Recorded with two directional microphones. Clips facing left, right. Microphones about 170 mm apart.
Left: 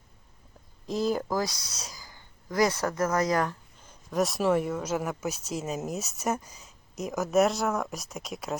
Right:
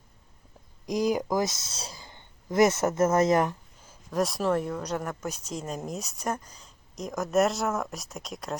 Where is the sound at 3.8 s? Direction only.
Centre (ahead or behind).